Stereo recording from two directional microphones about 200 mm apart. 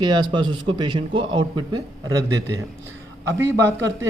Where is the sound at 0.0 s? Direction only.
20° right (ahead or behind).